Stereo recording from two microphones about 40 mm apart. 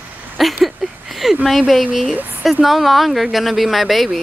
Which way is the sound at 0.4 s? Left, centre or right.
Centre.